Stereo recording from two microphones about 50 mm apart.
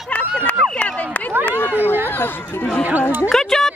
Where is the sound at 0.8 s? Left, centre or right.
Left.